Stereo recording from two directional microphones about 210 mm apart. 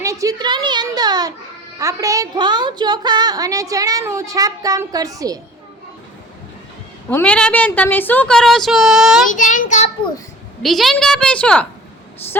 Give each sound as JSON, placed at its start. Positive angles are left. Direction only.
{"t": 0.0, "sound": "a woman's voice", "side_deg": -15}
{"t": 7.1, "sound": "a woman's voice", "side_deg": 5}
{"t": 9.2, "sound": "child singing", "side_deg": 40}
{"t": 10.6, "sound": "a woman's voice", "side_deg": 0}